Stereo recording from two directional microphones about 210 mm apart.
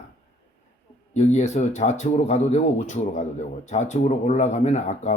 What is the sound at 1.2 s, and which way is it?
Speech, 35° left (ahead or behind).